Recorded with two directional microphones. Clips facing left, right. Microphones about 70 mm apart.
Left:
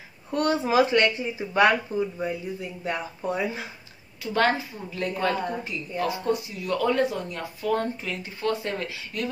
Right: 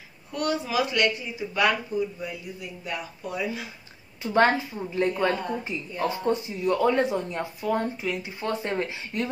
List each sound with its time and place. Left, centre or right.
0.3 s speech: left
4.2 s a woman's voice: right